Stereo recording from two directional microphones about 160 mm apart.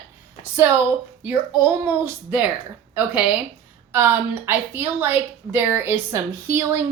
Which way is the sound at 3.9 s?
15° right (ahead or behind).